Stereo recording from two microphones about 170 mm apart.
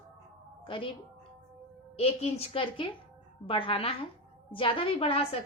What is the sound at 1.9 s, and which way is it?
A woman's voice, 35° left (ahead or behind).